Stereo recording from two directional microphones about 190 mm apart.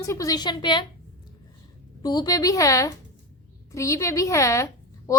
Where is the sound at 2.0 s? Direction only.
20° left (ahead or behind).